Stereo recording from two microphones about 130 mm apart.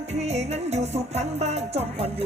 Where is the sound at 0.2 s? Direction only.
55° right (ahead or behind).